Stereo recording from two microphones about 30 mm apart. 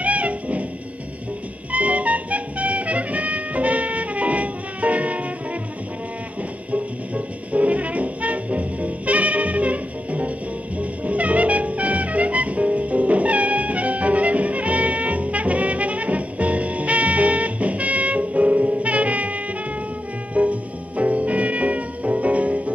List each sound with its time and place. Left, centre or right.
0.0 s music: right
1.7 s music: right
6.7 s brass instrument: right
10.8 s music: right